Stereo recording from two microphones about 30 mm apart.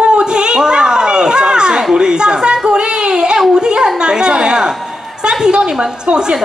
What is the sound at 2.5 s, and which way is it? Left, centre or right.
Child singing, right.